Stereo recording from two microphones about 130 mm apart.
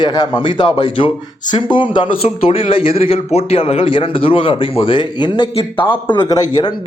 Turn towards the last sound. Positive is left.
turn(degrees=35)  # may be behind; listen again after turning